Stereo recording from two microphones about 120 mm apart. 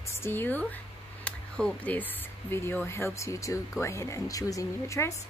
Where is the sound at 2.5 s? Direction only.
20° left (ahead or behind).